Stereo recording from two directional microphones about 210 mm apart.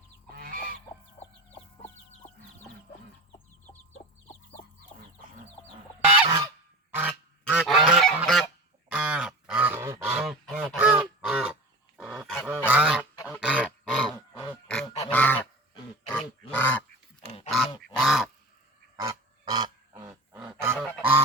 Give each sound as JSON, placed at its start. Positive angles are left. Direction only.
{"t": 0.3, "sound": "fowl", "side_deg": -45}
{"t": 6.2, "sound": "goose", "side_deg": -20}
{"t": 6.9, "sound": "goose", "side_deg": -10}
{"t": 13.4, "sound": "dog", "side_deg": -5}
{"t": 14.4, "sound": "a sound", "side_deg": 5}
{"t": 15.1, "sound": "goose", "side_deg": 10}
{"t": 16.0, "sound": "grunt", "side_deg": 5}
{"t": 17.5, "sound": "goose", "side_deg": 0}
{"t": 18.9, "sound": "goose", "side_deg": -15}